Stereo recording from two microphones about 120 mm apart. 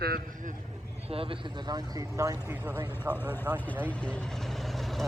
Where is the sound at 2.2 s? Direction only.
25° right (ahead or behind).